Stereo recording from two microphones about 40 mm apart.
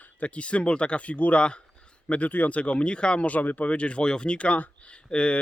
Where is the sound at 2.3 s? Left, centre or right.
Left.